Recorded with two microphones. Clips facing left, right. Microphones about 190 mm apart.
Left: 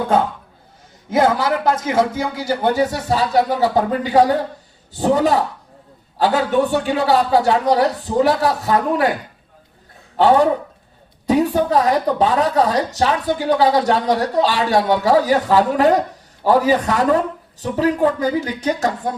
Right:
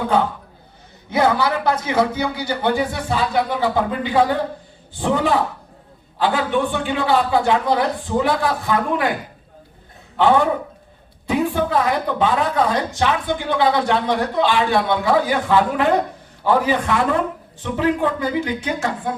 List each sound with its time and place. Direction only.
1.1 s a woman's voice: 45° left (ahead or behind)
10.2 s a woman's voice: 40° left (ahead or behind)